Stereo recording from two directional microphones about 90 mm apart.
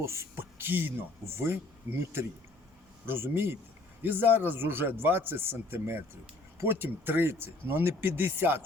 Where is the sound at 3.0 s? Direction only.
25° right (ahead or behind).